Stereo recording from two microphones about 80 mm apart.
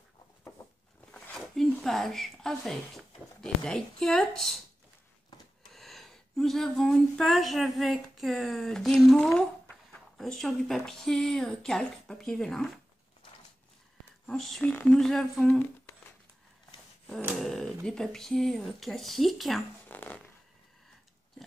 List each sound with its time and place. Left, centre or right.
1.3 s a sound: centre
1.8 s speech: centre
5.7 s speech: centre
14.2 s speech: centre
14.6 s a woman's voice: centre
17.4 s speech: centre
19.9 s a sound: left